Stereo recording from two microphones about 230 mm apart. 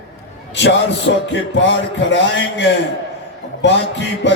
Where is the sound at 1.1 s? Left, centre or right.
Left.